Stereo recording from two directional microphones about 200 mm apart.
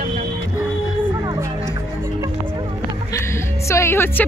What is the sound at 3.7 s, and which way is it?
Speech, 10° left (ahead or behind).